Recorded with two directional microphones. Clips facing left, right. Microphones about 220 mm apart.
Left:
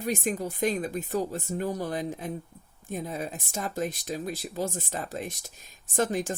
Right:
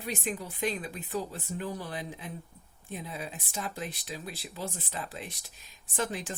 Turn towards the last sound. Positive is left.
turn(degrees=45)  # may be behind; listen again after turning